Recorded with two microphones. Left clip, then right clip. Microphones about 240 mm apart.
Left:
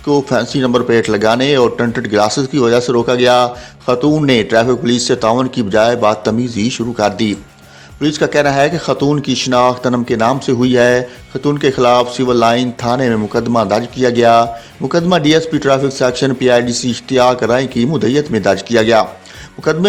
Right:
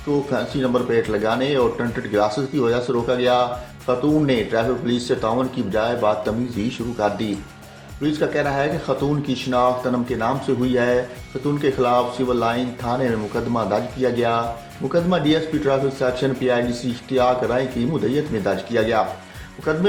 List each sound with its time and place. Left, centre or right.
0.1 s speech: left